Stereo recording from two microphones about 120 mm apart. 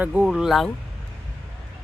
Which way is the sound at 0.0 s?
15° right (ahead or behind).